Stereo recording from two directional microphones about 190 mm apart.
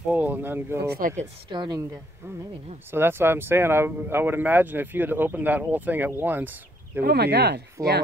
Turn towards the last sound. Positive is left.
turn(degrees=-15)  # may be behind; listen again after turning